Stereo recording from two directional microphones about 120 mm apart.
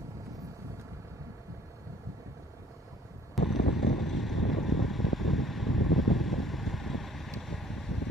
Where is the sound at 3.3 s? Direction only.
Centre (ahead or behind).